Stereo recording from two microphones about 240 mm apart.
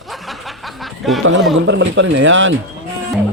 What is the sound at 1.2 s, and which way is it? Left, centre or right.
A man's voice, right.